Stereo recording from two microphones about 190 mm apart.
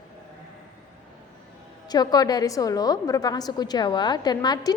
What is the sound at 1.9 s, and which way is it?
A woman's voice, 20° left (ahead or behind).